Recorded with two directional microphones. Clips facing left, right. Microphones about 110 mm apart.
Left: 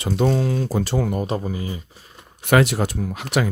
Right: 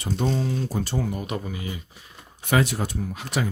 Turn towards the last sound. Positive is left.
turn(degrees=75)  # may be behind; listen again after turning